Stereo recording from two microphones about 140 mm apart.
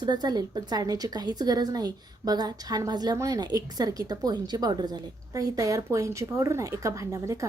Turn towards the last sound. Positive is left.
turn(degrees=-25)  # may be behind; listen again after turning